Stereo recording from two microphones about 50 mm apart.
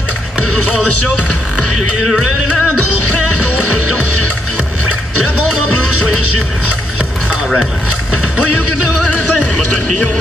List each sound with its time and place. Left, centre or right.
2.0 s music: centre
9.1 s music: left